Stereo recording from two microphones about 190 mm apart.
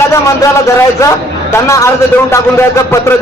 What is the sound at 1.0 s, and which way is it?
Speech, 15° left (ahead or behind).